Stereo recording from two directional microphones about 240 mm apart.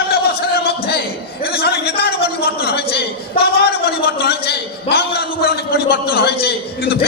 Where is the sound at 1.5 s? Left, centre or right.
Left.